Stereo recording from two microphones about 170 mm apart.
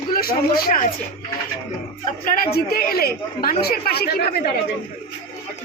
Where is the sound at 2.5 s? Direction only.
65° left (ahead or behind).